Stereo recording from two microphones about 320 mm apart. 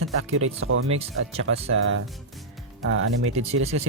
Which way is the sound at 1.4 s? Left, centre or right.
Right.